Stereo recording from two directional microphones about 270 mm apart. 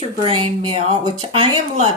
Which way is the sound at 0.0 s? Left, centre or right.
Centre.